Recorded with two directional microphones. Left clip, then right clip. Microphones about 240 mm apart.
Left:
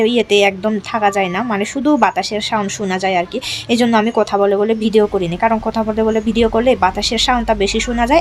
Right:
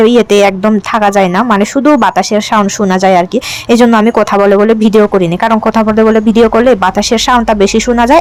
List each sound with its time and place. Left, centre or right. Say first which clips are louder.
0.0 s speech: right 7 dB; right